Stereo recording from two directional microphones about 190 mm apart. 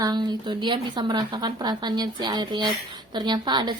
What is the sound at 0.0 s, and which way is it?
Speech, 20° right (ahead or behind).